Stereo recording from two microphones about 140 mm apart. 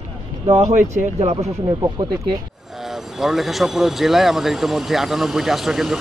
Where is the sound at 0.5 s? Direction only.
55° right (ahead or behind).